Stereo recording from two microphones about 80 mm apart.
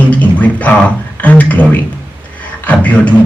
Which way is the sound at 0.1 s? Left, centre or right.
Centre.